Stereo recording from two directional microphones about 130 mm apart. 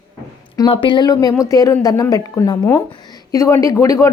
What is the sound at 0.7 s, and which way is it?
A woman's voice, 40° left (ahead or behind).